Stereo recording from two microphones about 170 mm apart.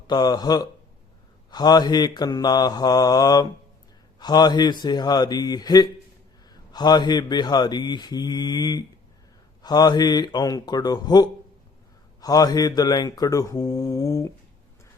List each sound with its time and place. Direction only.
0.1 s speech: 25° left (ahead or behind)